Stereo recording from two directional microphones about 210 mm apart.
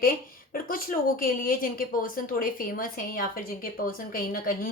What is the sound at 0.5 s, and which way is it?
Speech, 40° left (ahead or behind).